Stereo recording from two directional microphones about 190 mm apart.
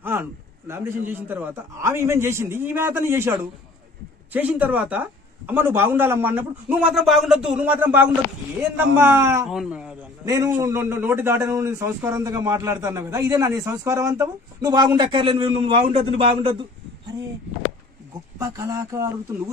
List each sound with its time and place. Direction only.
0.0 s a man's voice: 10° right (ahead or behind)
9.5 s speech: 5° right (ahead or behind)
10.2 s a man's voice: 15° right (ahead or behind)
18.4 s a man's voice: 20° right (ahead or behind)